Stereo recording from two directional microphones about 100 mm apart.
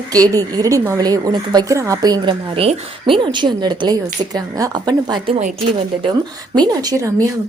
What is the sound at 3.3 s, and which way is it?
Speech, 45° right (ahead or behind).